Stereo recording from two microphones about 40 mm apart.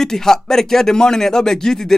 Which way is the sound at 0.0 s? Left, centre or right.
Centre.